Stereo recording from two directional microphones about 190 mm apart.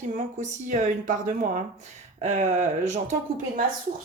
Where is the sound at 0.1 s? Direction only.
40° right (ahead or behind).